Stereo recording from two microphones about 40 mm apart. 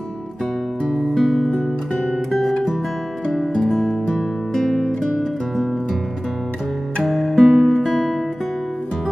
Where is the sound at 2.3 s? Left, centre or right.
Centre.